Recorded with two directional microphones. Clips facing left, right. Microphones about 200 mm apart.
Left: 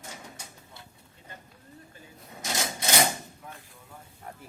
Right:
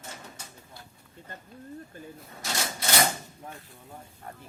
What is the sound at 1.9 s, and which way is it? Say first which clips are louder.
Speech: right 8 dB; 50° right (ahead or behind).